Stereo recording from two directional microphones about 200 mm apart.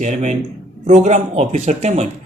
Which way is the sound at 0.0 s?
35° right (ahead or behind).